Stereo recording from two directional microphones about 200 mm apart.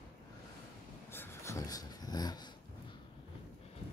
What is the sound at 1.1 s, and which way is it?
Dog, 10° left (ahead or behind).